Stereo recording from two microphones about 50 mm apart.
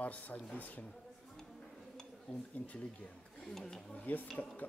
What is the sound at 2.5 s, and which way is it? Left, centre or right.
Speech, left.